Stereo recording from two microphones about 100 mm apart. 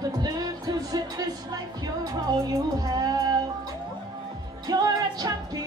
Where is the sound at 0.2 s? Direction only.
40° right (ahead or behind).